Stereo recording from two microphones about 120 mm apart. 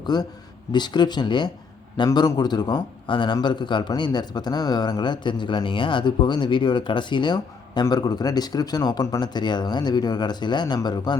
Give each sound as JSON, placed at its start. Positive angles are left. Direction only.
{"t": 0.0, "sound": "a man's voice", "side_deg": 35}